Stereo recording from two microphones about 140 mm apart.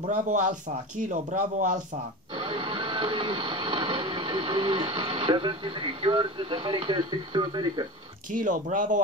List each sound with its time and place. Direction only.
0.0 s speech: 65° right (ahead or behind)
2.3 s printer: 35° right (ahead or behind)
8.3 s speech: 70° right (ahead or behind)